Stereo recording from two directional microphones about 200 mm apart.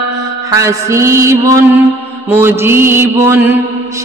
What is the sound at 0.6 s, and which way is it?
Mantra, 15° right (ahead or behind).